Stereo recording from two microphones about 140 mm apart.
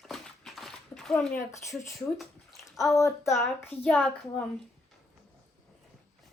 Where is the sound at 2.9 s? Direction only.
20° left (ahead or behind).